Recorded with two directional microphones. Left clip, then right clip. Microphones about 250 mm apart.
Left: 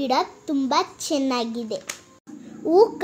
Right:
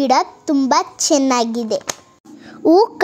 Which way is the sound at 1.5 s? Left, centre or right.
Right.